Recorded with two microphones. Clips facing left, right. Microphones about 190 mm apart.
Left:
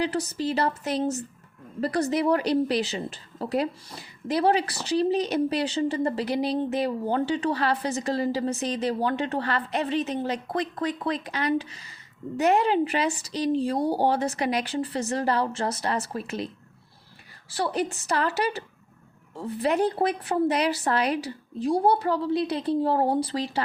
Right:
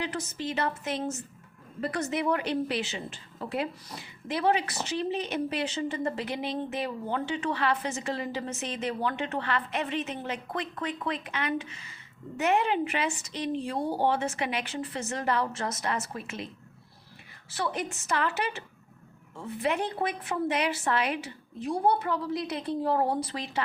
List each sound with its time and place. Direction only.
0.0 s a woman's voice: 35° left (ahead or behind)
17.5 s a woman's voice: 35° left (ahead or behind)